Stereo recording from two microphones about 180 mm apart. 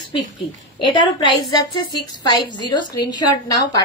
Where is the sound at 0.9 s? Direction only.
25° left (ahead or behind).